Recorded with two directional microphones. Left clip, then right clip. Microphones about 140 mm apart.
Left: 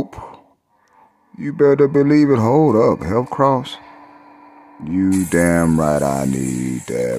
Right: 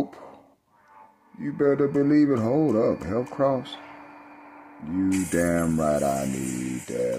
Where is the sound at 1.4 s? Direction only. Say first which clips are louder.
Left 9 dB; 90° left.